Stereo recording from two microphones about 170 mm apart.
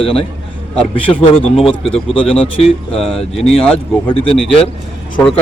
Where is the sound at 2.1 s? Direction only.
30° left (ahead or behind).